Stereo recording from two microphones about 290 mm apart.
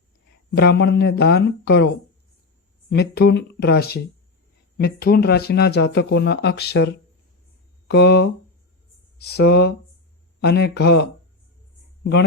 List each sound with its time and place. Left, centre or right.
0.5 s speech: left
2.9 s speech: left